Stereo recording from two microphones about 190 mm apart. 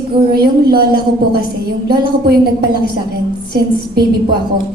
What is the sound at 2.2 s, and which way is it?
A woman's voice, 55° right (ahead or behind).